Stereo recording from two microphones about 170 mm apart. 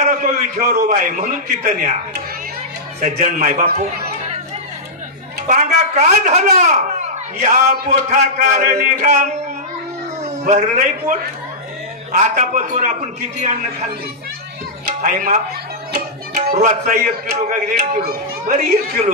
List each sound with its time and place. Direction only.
0.0 s a sound: 50° right (ahead or behind)
0.7 s a man's voice: 55° right (ahead or behind)
3.0 s a man's voice: 45° right (ahead or behind)
5.5 s a man's voice: 45° right (ahead or behind)
15.0 s speech: 50° right (ahead or behind)
16.5 s a man's voice: 50° right (ahead or behind)